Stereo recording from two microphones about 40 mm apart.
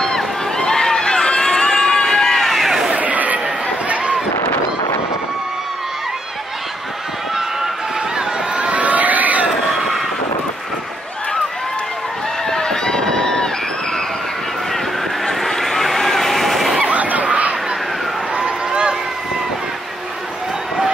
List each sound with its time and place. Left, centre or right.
0.6 s run: centre
1.6 s a sound: centre
2.5 s a sound: centre
3.0 s chatter: right
3.9 s fireworks: right
8.5 s crowd: right
9.7 s vehicle: centre
12.4 s run: centre
15.2 s vehicle: centre
16.8 s a sound: right
18.4 s run: right